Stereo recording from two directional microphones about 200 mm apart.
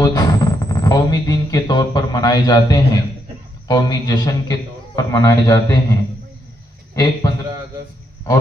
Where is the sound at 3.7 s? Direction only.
20° left (ahead or behind).